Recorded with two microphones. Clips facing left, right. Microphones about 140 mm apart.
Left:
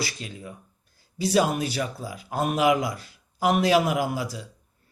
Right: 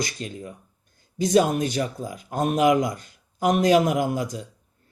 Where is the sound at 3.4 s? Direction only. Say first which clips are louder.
Right 2 dB; 40° right (ahead or behind).